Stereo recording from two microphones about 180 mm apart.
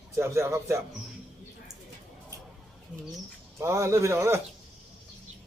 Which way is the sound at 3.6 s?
15° right (ahead or behind).